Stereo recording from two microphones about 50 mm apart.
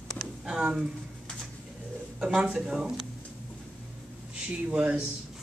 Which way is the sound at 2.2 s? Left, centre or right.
Centre.